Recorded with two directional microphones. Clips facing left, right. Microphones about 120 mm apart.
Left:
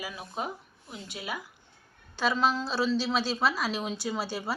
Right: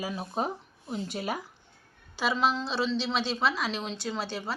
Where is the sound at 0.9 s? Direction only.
40° right (ahead or behind).